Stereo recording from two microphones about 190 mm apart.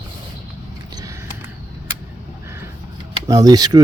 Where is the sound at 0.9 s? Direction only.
20° right (ahead or behind).